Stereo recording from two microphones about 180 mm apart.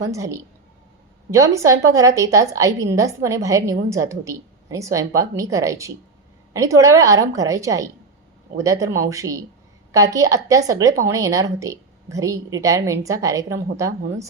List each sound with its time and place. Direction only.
0.0 s a woman's voice: 15° right (ahead or behind)